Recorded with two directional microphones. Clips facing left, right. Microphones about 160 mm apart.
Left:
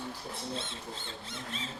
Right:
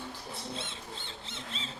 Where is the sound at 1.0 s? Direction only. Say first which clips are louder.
Left 2 dB; 25° right (ahead or behind).